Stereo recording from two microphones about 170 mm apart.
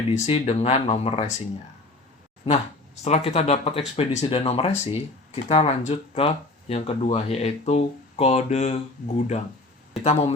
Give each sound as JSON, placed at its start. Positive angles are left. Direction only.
{"t": 0.1, "sound": "speech", "side_deg": 35}
{"t": 3.0, "sound": "speech", "side_deg": 40}